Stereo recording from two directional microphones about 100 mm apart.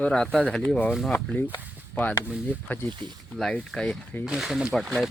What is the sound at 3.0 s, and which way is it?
Speech, 50° right (ahead or behind).